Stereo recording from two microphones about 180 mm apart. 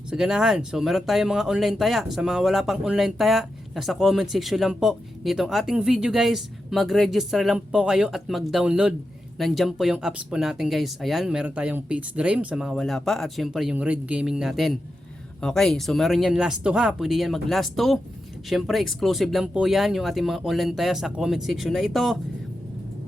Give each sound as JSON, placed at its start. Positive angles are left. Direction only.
{"t": 0.1, "sound": "speech", "side_deg": -5}